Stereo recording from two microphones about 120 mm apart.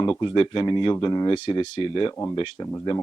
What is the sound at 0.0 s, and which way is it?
Speech, 35° left (ahead or behind).